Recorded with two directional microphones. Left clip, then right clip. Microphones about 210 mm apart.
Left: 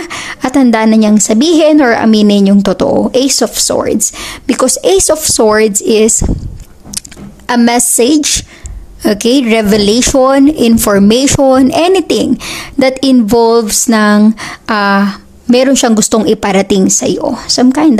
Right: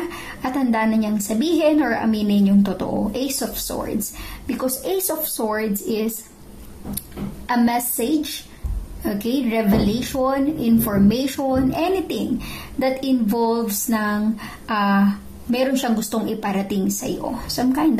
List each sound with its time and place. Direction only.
0.1 s speech: 50° left (ahead or behind)
7.4 s speech: 50° left (ahead or behind)